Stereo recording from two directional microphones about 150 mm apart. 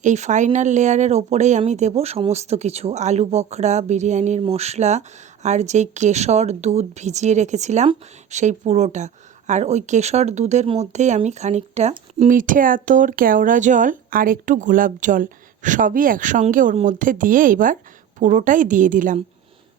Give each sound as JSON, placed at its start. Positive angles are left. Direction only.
{"t": 0.0, "sound": "speech", "side_deg": -55}